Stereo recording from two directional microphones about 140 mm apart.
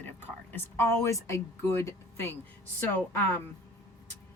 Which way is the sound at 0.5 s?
20° left (ahead or behind).